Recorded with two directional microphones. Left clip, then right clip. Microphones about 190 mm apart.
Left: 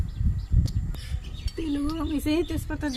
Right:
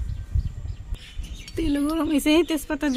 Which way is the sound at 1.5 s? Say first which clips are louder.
Right 5 dB; 60° right (ahead or behind).